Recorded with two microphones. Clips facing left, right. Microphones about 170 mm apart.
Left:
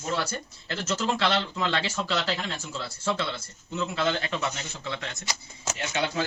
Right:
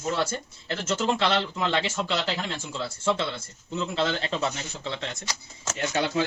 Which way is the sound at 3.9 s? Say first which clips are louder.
Right 1 dB; 30° right (ahead or behind).